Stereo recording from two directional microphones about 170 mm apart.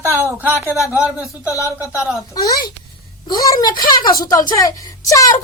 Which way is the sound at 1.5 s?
20° left (ahead or behind).